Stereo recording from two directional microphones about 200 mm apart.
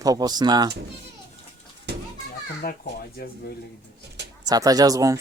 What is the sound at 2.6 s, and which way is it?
Speech, 45° left (ahead or behind).